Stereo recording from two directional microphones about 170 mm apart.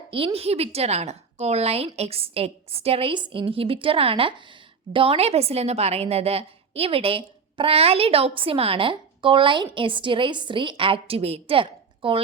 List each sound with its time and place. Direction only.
0.3 s a woman's voice: 35° right (ahead or behind)